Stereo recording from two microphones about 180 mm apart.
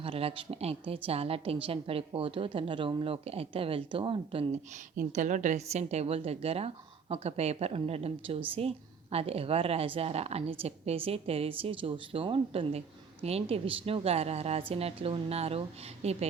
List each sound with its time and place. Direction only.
0.0 s a woman's voice: 30° right (ahead or behind)
4.9 s a woman's voice: 45° right (ahead or behind)